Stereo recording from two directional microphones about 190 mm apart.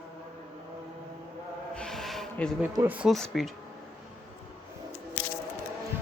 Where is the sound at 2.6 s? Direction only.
10° right (ahead or behind).